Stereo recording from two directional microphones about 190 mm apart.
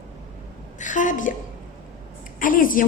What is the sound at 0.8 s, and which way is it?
Speech, 40° left (ahead or behind).